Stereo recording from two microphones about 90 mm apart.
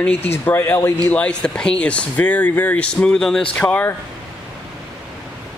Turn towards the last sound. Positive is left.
turn(degrees=20)  # may be behind; listen again after turning